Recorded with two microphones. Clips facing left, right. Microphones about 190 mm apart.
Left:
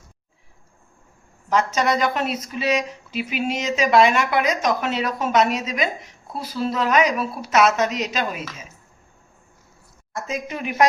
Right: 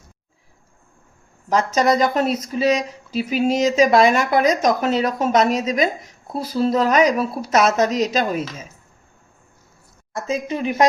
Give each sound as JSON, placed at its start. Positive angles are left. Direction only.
{"t": 1.5, "sound": "speech", "side_deg": -40}
{"t": 10.2, "sound": "speech", "side_deg": -30}